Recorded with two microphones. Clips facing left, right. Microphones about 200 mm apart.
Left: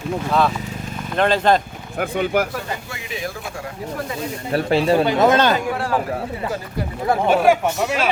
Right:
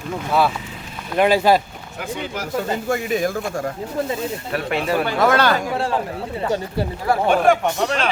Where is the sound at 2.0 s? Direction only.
55° left (ahead or behind).